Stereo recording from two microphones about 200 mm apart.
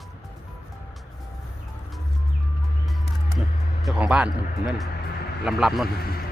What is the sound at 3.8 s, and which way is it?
Speech, 5° right (ahead or behind).